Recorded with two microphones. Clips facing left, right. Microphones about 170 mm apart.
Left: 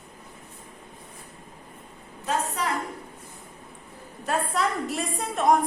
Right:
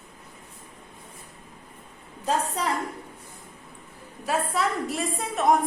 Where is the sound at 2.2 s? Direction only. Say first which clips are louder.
Right 1 dB; 30° right (ahead or behind).